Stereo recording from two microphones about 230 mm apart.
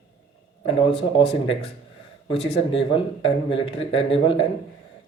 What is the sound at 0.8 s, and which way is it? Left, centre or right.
Speech, left.